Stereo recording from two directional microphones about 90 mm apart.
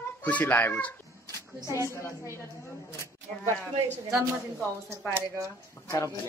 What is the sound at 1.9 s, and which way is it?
Speech, 30° left (ahead or behind).